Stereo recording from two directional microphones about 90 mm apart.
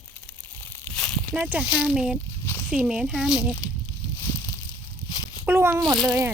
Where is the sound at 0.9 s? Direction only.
10° left (ahead or behind).